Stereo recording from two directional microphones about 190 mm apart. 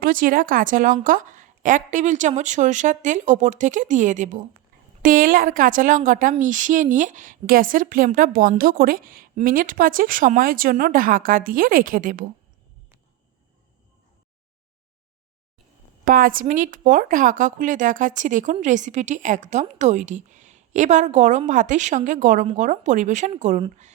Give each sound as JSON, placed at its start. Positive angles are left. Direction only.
{"t": 0.0, "sound": "a woman's voice", "side_deg": -45}
{"t": 16.0, "sound": "a woman's voice", "side_deg": -45}